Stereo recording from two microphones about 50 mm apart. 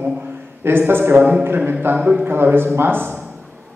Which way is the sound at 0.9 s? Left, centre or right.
Right.